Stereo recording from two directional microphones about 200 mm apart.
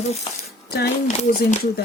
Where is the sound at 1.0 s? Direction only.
35° left (ahead or behind).